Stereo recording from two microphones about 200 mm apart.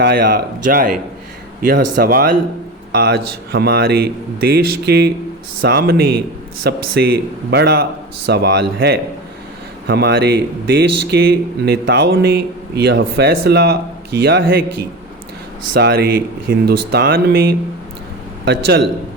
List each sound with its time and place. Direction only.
0.0 s speech: 45° right (ahead or behind)
9.8 s speech: 55° right (ahead or behind)
15.7 s speech: 50° right (ahead or behind)